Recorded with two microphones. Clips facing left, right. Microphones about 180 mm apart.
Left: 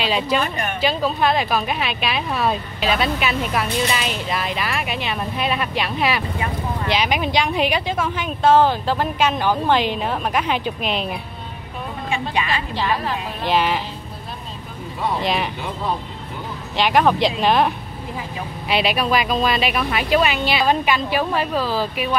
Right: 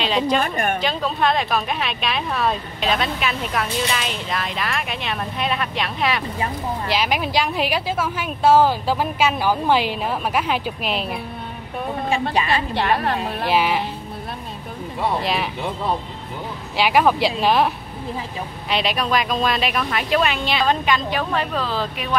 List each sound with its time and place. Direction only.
0.0 s a woman's voice: 5° left (ahead or behind)
0.4 s a woman's voice: 50° right (ahead or behind)
0.7 s speech: 5° left (ahead or behind)
12.1 s a woman's voice: 35° right (ahead or behind)
12.7 s a woman's voice: 60° right (ahead or behind)
13.5 s speech: 5° right (ahead or behind)
15.2 s speech: centre (ahead or behind)
16.7 s speech: 5° right (ahead or behind)